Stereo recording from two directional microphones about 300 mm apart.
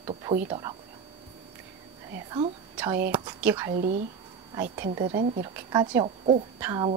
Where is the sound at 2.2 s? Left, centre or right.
Centre.